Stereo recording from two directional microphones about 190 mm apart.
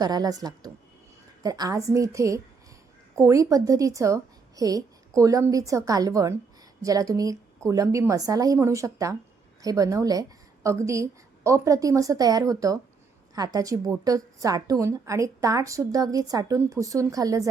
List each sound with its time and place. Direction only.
0.0 s a woman's voice: 20° right (ahead or behind)